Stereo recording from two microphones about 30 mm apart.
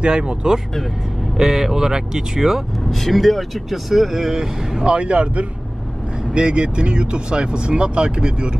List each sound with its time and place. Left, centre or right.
0.0 s speech: right
1.3 s speech: centre
2.9 s speech: centre
4.8 s speech: right
6.3 s speech: right